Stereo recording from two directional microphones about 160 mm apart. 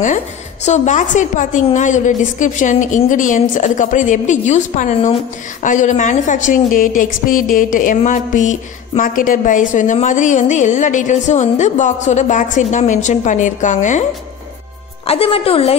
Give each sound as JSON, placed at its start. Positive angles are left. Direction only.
{"t": 0.7, "sound": "a woman's voice", "side_deg": 50}
{"t": 15.0, "sound": "a woman's voice", "side_deg": 35}